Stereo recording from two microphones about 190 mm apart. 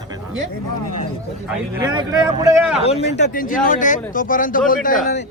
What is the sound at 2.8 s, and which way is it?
Speech, 35° left (ahead or behind).